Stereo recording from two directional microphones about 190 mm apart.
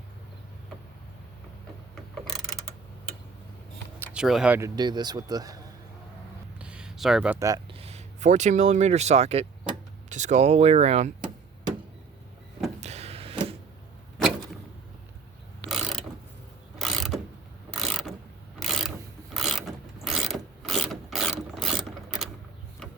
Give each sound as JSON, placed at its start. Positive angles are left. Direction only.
{"t": 2.1, "sound": "ratchet", "side_deg": 0}
{"t": 4.0, "sound": "speech", "side_deg": -5}
{"t": 6.6, "sound": "a sound", "side_deg": -5}
{"t": 7.3, "sound": "speech", "side_deg": -15}
{"t": 7.7, "sound": "speech", "side_deg": -30}
{"t": 12.8, "sound": "a sound", "side_deg": -35}
{"t": 15.7, "sound": "ratchet", "side_deg": 0}
{"t": 17.7, "sound": "mechanisms", "side_deg": 0}
{"t": 18.6, "sound": "filing", "side_deg": 0}
{"t": 19.3, "sound": "mechanisms", "side_deg": 0}